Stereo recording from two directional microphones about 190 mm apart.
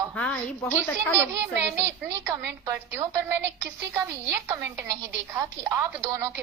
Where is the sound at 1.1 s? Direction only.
15° right (ahead or behind).